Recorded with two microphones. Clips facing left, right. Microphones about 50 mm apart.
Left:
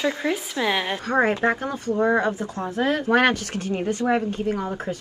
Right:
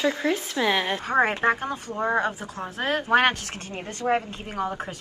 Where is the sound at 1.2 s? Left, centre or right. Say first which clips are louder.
Left 1 dB; right.